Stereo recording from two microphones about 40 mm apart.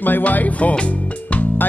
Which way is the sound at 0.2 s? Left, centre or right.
Left.